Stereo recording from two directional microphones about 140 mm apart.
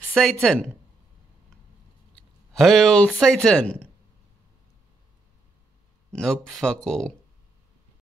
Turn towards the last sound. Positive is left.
turn(degrees=5)  # may be behind; listen again after turning